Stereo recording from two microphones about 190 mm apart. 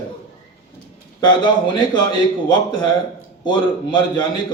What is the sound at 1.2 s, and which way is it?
A man's voice, 25° left (ahead or behind).